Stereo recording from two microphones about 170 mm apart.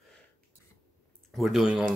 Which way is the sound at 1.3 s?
Centre (ahead or behind).